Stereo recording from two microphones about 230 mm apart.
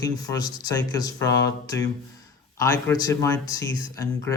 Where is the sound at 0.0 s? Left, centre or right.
Centre.